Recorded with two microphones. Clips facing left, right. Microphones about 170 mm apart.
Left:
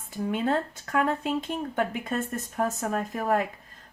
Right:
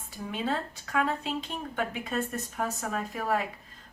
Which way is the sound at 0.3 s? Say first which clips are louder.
Left 5 dB; 50° left (ahead or behind).